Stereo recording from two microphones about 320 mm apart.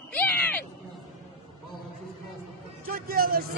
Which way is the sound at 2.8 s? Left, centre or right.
Right.